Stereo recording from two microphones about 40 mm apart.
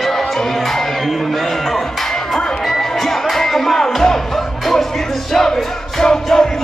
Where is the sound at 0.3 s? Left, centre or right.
Centre.